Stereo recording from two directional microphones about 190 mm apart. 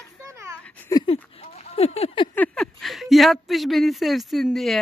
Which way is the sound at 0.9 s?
30° left (ahead or behind).